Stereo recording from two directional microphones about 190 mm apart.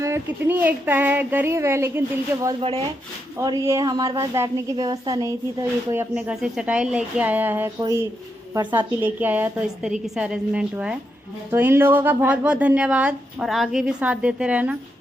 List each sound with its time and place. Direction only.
0.0 s speech: 10° right (ahead or behind)
2.6 s speech: 30° right (ahead or behind)
3.3 s speech: 15° right (ahead or behind)
9.0 s a woman's voice: 10° right (ahead or behind)